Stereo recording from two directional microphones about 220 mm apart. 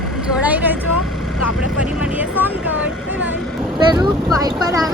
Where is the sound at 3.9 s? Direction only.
20° right (ahead or behind).